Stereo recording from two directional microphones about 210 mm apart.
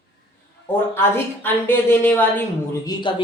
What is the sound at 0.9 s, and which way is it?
A woman's voice, 10° left (ahead or behind).